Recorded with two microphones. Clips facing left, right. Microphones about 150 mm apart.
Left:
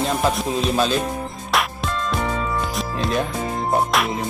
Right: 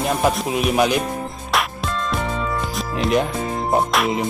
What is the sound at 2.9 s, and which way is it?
Speech, 20° right (ahead or behind).